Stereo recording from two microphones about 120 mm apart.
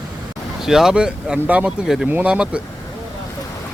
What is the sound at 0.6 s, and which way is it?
Speech, 5° right (ahead or behind).